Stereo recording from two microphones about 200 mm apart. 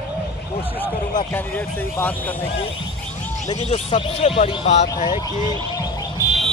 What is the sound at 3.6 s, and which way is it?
Speech, 30° left (ahead or behind).